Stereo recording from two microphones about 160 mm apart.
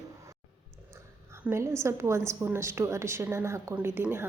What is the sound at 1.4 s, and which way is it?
A woman's voice, 15° right (ahead or behind).